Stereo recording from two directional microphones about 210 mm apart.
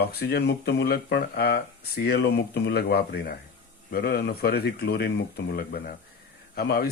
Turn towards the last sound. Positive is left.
turn(degrees=50)  # may be behind; listen again after turning